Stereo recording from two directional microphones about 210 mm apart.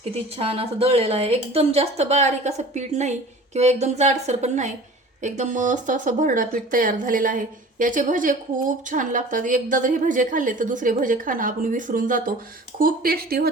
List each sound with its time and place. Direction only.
0.0 s speech: 25° right (ahead or behind); by 13.5 s 45° right (ahead or behind)